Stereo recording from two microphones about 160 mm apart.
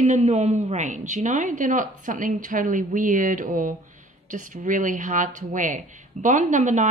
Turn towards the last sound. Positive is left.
turn(degrees=-50)  # may be behind; listen again after turning